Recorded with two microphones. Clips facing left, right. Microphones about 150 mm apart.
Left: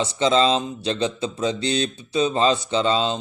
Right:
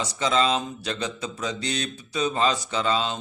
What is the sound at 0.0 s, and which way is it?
A man's voice, 25° left (ahead or behind).